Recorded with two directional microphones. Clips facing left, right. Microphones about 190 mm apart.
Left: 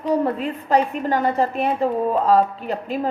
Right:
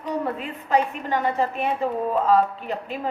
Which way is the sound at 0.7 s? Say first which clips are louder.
Left 3 dB; 40° left (ahead or behind).